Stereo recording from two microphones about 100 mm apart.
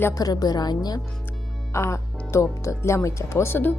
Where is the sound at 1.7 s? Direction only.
30° left (ahead or behind).